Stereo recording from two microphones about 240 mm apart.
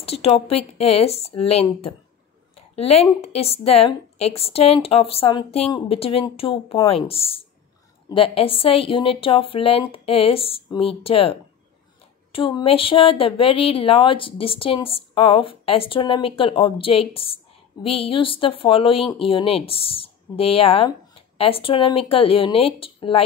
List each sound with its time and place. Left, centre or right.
0.0 s a woman's voice: left